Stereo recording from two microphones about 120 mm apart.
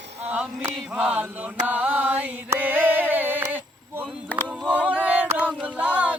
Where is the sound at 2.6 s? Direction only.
15° right (ahead or behind).